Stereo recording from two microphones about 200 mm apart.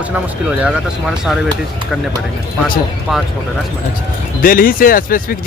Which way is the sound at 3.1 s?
Centre (ahead or behind).